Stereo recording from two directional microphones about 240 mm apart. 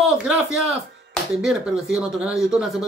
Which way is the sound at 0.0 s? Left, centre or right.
Centre.